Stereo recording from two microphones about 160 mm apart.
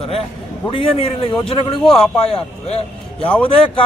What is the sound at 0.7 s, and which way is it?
Speech, 35° left (ahead or behind).